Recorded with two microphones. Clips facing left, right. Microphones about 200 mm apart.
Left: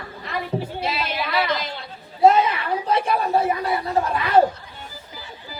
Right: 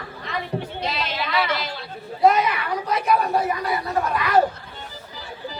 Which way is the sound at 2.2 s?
30° left (ahead or behind).